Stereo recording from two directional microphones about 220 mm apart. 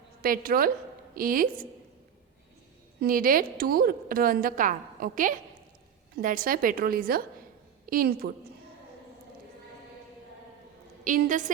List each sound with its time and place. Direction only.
0.2 s a woman's voice: 40° right (ahead or behind)
3.0 s a woman's voice: 40° right (ahead or behind)
11.0 s a woman's voice: 35° right (ahead or behind)